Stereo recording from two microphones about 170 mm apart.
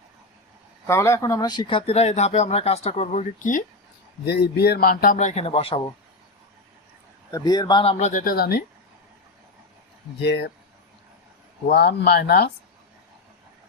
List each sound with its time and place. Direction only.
0.9 s speech: 15° left (ahead or behind); by 3.6 s 45° left (ahead or behind)
4.3 s speech: 70° left (ahead or behind)
5.1 s speech: 40° left (ahead or behind)
7.3 s speech: 20° left (ahead or behind)
7.9 s speech: 50° left (ahead or behind); by 8.6 s 65° left (ahead or behind)
10.2 s speech: 90° left
11.7 s speech: 75° left (ahead or behind)